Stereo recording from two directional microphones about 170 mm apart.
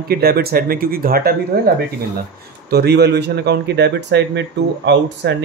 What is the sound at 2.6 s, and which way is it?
A man's voice, 70° right (ahead or behind).